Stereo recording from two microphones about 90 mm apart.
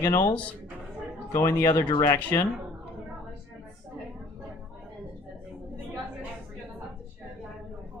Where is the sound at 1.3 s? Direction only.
35° left (ahead or behind).